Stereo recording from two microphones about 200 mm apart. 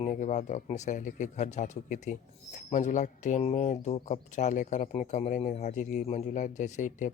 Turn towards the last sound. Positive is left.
turn(degrees=35)  # may be behind; listen again after turning